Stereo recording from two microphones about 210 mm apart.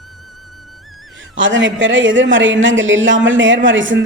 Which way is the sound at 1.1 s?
65° right (ahead or behind).